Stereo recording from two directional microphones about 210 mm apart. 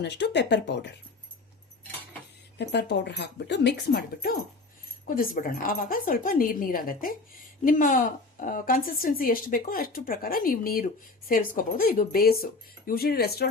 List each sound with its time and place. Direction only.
0.0 s speech: 55° left (ahead or behind)
2.6 s speech: 55° left (ahead or behind)